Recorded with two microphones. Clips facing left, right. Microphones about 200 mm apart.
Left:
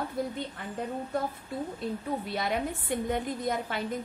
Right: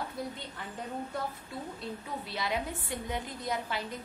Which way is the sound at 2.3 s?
55° left (ahead or behind).